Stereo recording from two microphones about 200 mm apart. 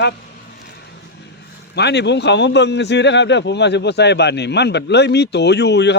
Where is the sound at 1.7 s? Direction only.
60° left (ahead or behind).